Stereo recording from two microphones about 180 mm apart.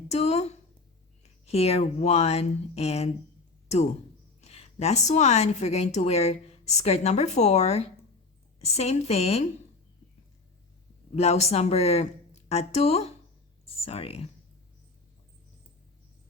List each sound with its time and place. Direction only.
0.1 s a woman's voice: 35° left (ahead or behind)
4.4 s a woman's voice: 35° left (ahead or behind)
11.1 s a woman's voice: 35° left (ahead or behind)